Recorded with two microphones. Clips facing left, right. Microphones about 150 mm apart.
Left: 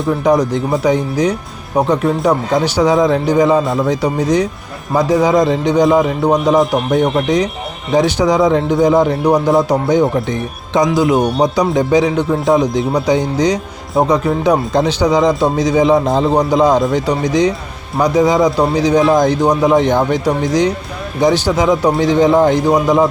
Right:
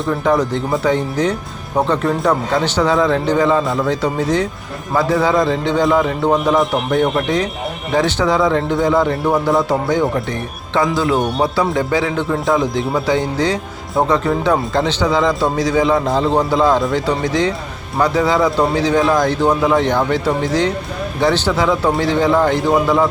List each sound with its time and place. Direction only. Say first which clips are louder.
0.3 s a man's voice: left 3 dB; 15° left (ahead or behind)